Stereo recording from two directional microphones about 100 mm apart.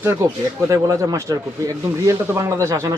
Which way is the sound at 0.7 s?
35° right (ahead or behind).